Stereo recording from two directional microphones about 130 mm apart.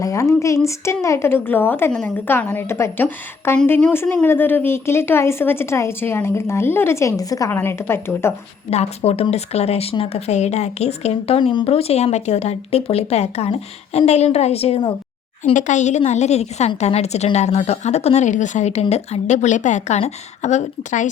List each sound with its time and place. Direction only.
0.0 s a woman's voice: 25° left (ahead or behind)
8.7 s speech: 55° left (ahead or behind)
15.5 s speech: 70° left (ahead or behind)